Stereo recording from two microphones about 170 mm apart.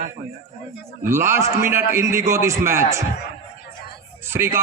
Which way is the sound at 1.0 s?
15° right (ahead or behind).